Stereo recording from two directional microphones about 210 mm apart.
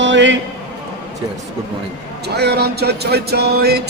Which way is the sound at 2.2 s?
50° right (ahead or behind).